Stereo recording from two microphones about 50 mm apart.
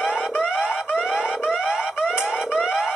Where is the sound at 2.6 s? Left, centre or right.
Centre.